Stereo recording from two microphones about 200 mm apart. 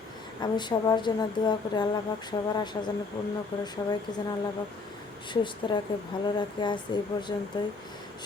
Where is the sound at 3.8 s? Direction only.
15° left (ahead or behind).